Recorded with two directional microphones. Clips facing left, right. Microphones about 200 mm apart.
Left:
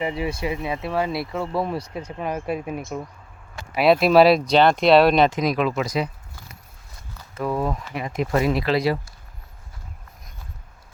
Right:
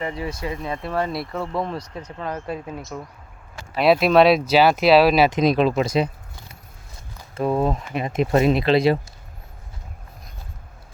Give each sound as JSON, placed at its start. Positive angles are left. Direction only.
{"t": 0.0, "sound": "speech", "side_deg": 10}
{"t": 3.8, "sound": "speech", "side_deg": 0}
{"t": 5.3, "sound": "speech", "side_deg": -25}